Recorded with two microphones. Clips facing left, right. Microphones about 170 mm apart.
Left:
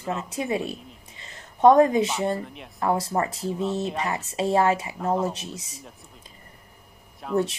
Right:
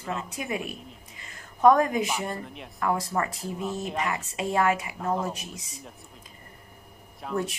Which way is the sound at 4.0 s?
30° left (ahead or behind).